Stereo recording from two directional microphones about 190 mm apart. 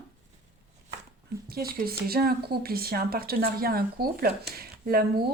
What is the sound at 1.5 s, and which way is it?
A woman's voice, 55° right (ahead or behind).